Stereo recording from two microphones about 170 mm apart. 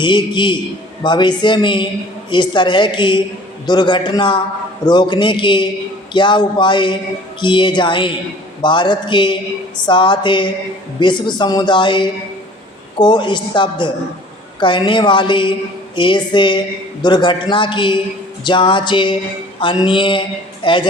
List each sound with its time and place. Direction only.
0.0 s speech: 25° left (ahead or behind)